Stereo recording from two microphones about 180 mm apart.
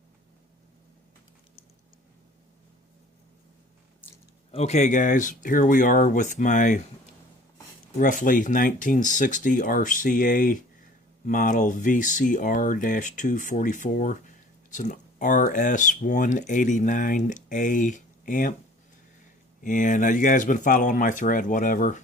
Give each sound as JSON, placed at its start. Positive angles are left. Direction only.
{"t": 4.5, "sound": "speech", "side_deg": 40}
{"t": 7.9, "sound": "speech", "side_deg": 50}
{"t": 19.6, "sound": "speech", "side_deg": 45}